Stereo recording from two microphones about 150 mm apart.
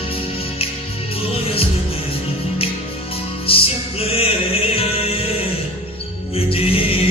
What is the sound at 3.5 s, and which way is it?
Music, 40° left (ahead or behind).